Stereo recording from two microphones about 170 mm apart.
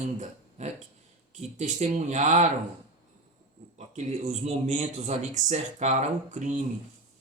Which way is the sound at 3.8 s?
45° right (ahead or behind).